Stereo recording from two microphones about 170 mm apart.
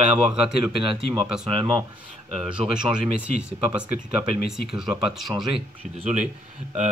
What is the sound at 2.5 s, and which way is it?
Speech, 5° right (ahead or behind).